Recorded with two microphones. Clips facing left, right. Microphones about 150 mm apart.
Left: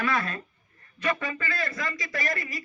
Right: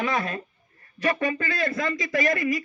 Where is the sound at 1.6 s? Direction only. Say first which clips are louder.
Right 6 dB; 25° right (ahead or behind).